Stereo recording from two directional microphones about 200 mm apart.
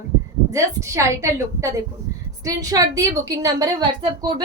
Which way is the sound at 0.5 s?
15° right (ahead or behind).